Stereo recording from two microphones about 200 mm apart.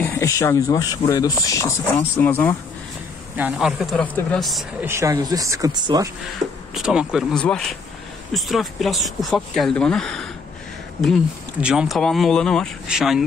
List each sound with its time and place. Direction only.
0.0 s speech: 15° left (ahead or behind)
3.3 s speech: 5° right (ahead or behind)
4.8 s speech: 15° right (ahead or behind)
6.7 s speech: 5° right (ahead or behind)
11.6 s speech: 5° right (ahead or behind)